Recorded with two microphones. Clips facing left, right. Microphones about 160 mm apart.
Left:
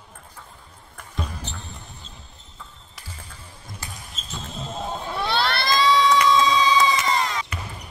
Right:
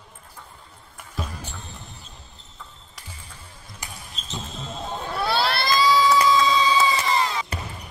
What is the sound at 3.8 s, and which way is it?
Basketball bounce, 15° right (ahead or behind).